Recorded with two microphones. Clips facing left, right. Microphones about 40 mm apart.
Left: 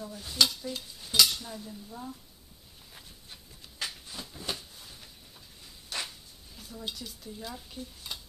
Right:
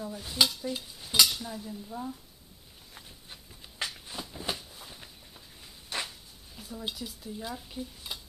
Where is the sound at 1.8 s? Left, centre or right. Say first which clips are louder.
Right 5 dB; centre.